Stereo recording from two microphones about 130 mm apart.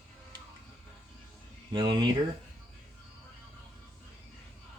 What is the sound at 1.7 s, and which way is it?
Speech, 40° right (ahead or behind).